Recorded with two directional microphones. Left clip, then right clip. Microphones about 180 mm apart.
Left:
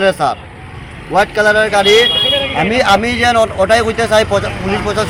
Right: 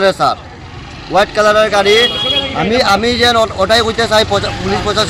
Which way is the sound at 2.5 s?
Centre (ahead or behind).